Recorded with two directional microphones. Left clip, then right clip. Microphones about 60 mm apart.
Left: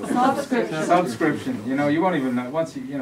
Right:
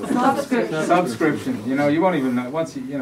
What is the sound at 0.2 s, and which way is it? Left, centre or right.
Speech, right.